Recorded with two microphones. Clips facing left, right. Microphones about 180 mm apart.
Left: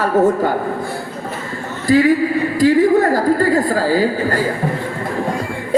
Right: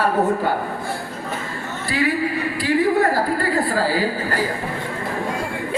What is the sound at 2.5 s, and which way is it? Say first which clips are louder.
A woman's voice: left 6 dB; 45° left (ahead or behind).